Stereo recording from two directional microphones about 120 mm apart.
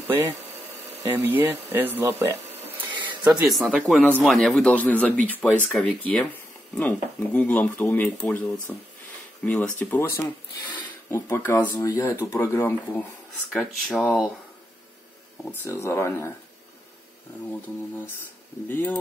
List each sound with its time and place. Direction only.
0.0 s speech: 30° right (ahead or behind)
2.0 s a sound: 20° right (ahead or behind)
3.4 s speech: centre (ahead or behind)
3.8 s speech: 10° left (ahead or behind)
13.5 s speech: centre (ahead or behind)
15.6 s speech: 20° left (ahead or behind)